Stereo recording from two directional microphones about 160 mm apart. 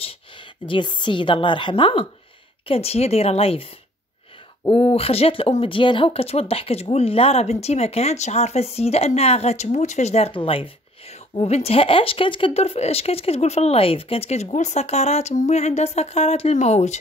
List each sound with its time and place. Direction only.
0.7 s speech: 30° left (ahead or behind)
4.6 s speech: 5° left (ahead or behind)
4.9 s speech: 40° left (ahead or behind)